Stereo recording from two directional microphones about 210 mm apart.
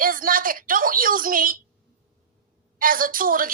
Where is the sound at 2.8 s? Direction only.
40° right (ahead or behind).